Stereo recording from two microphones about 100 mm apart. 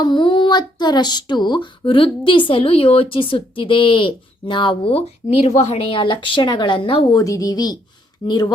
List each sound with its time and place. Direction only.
0.0 s speech: 50° left (ahead or behind)
7.2 s speech: 35° left (ahead or behind)